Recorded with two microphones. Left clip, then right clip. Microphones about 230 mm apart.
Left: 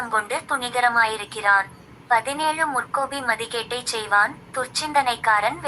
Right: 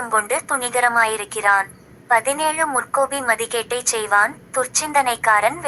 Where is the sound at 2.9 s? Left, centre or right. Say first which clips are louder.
Right 5 dB; right.